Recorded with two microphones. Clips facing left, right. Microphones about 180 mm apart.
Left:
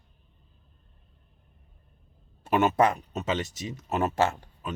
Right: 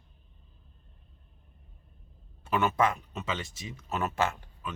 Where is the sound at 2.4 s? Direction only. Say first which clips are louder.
Left 4 dB; 40° left (ahead or behind).